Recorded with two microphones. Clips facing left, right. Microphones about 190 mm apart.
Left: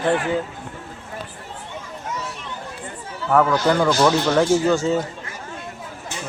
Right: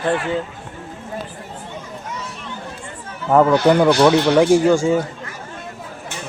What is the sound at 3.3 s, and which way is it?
Speech, 25° right (ahead or behind).